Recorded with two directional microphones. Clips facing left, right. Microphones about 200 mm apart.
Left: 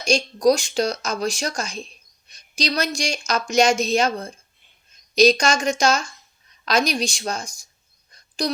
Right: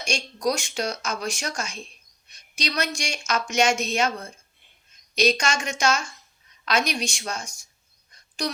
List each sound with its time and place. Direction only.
0.0 s speech: 35° left (ahead or behind)